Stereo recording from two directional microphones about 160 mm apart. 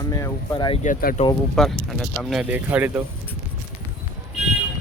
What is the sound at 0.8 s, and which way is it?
Speech, 60° left (ahead or behind).